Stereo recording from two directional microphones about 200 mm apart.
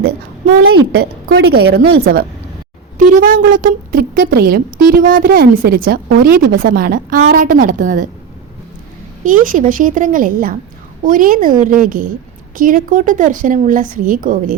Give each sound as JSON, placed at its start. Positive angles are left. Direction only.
{"t": 1.3, "sound": "speech", "side_deg": -55}
{"t": 3.0, "sound": "a woman's voice", "side_deg": -45}
{"t": 9.2, "sound": "a woman's voice", "side_deg": -40}